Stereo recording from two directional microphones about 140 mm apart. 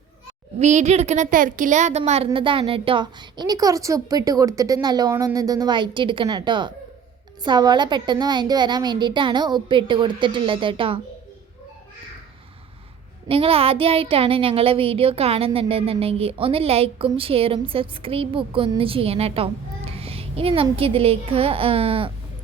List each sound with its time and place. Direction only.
0.6 s a woman's voice: 55° right (ahead or behind); by 11.0 s 40° right (ahead or behind)
13.2 s a woman's voice: 40° right (ahead or behind)